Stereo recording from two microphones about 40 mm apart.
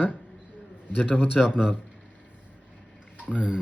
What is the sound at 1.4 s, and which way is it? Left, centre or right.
Speech, centre.